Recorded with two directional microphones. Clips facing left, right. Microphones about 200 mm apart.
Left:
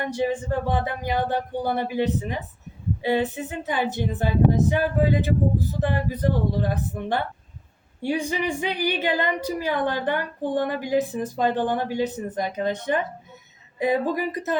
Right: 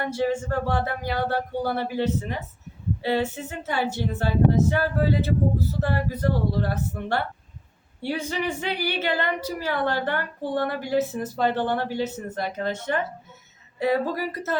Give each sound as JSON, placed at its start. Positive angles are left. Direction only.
{"t": 0.0, "sound": "a woman's voice", "side_deg": 15}